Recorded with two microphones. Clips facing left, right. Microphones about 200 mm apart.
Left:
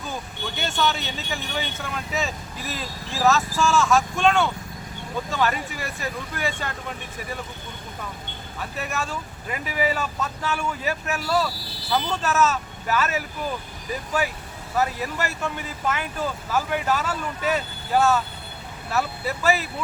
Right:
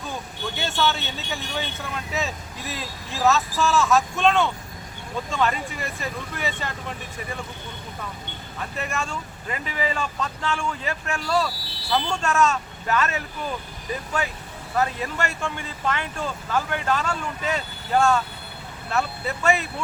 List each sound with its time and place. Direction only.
0.5 s speech: centre (ahead or behind)
8.8 s speech: 5° left (ahead or behind)
14.8 s speech: 5° left (ahead or behind)